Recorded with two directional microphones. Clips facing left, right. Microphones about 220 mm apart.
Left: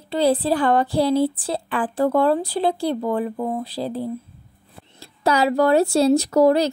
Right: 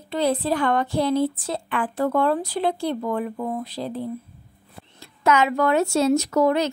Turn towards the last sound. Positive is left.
turn(degrees=35)  # may be behind; listen again after turning